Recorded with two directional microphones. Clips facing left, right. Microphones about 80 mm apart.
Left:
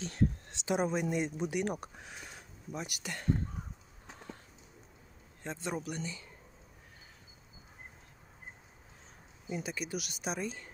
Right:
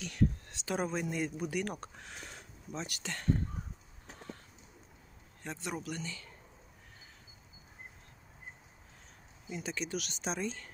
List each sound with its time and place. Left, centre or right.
0.0 s a sound: left
0.7 s speech: centre
5.4 s speech: left
9.5 s speech: centre